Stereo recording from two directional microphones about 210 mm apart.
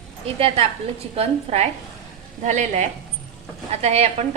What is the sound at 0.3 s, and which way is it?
A woman's voice, 25° right (ahead or behind).